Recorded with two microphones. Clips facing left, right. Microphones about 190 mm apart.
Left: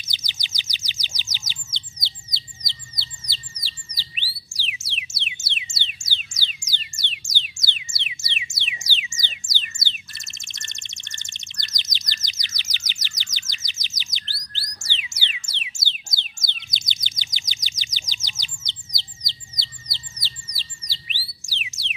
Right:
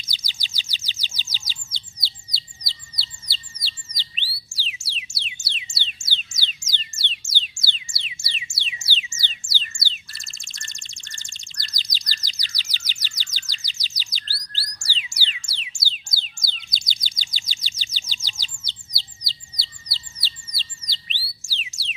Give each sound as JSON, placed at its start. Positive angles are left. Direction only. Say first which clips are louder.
{"t": 0.0, "sound": "chirp", "louder": "even", "side_deg": 20}
{"t": 2.3, "sound": "bird", "louder": "left 1 dB", "side_deg": 20}
{"t": 7.7, "sound": "music", "louder": "left 3 dB", "side_deg": 20}
{"t": 16.6, "sound": "bird", "louder": "even", "side_deg": 20}